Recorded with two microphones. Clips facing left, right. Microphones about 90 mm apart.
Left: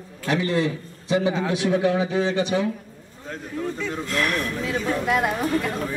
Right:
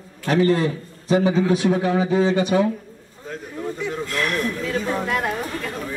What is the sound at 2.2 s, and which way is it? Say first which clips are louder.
Speech: right 4 dB; 40° right (ahead or behind).